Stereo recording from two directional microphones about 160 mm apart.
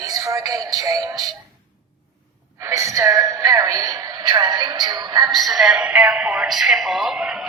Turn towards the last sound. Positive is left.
turn(degrees=0)  # may be behind; listen again after turning